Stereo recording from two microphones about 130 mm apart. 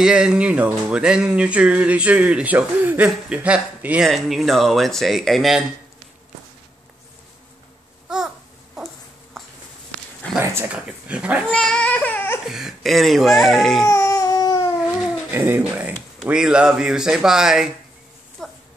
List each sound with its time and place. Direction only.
0.0 s speech: 5° right (ahead or behind)
8.1 s babbling: 5° right (ahead or behind)
9.4 s a sound: 5° left (ahead or behind)
10.4 s speech: 20° right (ahead or behind)
10.7 s speech: 10° right (ahead or behind)
11.5 s baby cry: 5° left (ahead or behind)
12.4 s speech: 5° right (ahead or behind)
13.8 s a sound: 20° left (ahead or behind)
15.3 s speech: 15° right (ahead or behind)
18.4 s a sound: 5° left (ahead or behind)